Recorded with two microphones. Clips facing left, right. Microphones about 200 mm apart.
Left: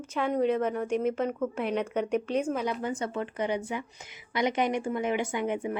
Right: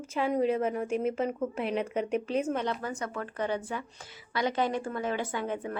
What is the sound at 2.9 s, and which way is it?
Speech, 30° left (ahead or behind).